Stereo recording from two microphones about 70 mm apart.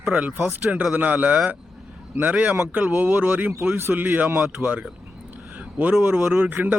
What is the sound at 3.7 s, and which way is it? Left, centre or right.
Speech, right.